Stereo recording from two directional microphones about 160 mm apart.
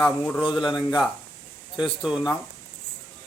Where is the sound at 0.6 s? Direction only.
25° left (ahead or behind).